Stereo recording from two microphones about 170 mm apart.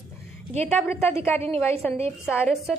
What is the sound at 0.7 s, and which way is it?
Speech, 10° left (ahead or behind).